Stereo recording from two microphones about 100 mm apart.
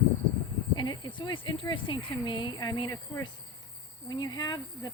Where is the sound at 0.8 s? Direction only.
50° left (ahead or behind).